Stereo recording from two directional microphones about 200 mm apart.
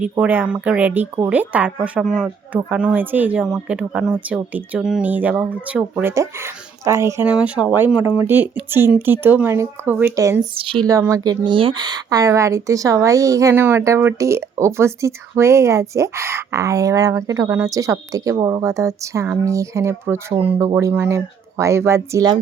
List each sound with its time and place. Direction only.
0.0 s speech: 10° right (ahead or behind)
10.5 s speech: 25° right (ahead or behind)